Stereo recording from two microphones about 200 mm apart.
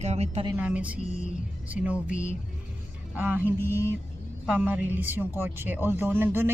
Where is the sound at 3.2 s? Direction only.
10° right (ahead or behind).